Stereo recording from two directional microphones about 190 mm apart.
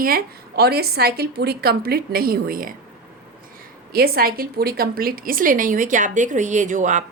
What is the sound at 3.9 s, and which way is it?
A woman's voice, 50° right (ahead or behind).